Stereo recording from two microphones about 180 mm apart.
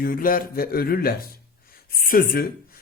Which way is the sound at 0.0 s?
50° left (ahead or behind).